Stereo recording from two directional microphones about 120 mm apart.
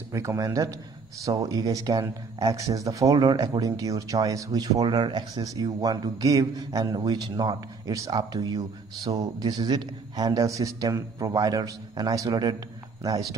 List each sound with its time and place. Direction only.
0.1 s a man's voice: 25° right (ahead or behind)